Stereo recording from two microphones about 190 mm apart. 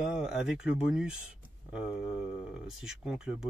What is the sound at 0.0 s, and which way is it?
Speech, 5° right (ahead or behind).